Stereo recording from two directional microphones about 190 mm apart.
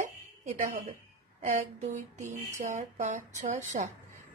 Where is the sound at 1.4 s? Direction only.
40° right (ahead or behind).